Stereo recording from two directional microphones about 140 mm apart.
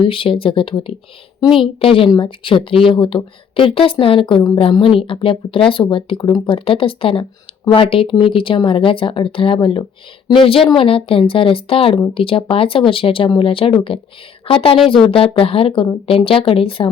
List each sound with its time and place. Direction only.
0.0 s speech: 40° left (ahead or behind)
1.5 s a woman's voice: centre (ahead or behind)
1.8 s speech: 40° left (ahead or behind)